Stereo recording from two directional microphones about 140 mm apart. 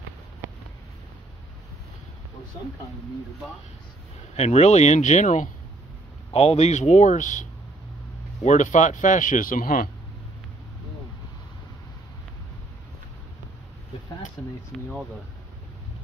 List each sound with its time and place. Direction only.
4.4 s speech: 50° left (ahead or behind); by 9.8 s 90° left
14.4 s speech: 10° left (ahead or behind)